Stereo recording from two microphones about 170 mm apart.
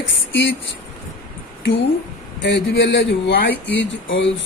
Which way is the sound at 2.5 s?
90° left.